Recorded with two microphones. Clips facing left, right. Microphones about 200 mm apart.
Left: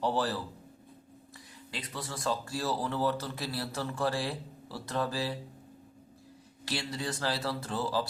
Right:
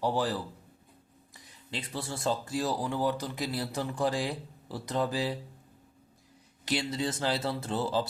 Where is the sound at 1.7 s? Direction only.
30° right (ahead or behind).